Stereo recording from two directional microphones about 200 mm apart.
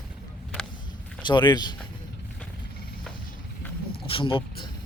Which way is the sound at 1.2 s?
25° left (ahead or behind).